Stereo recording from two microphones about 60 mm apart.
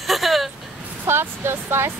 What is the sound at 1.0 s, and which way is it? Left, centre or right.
Speech, right.